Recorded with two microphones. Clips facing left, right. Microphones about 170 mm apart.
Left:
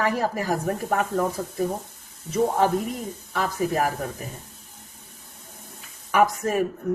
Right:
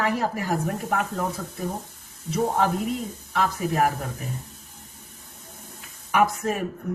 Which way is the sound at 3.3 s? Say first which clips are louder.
Even; 40° left (ahead or behind).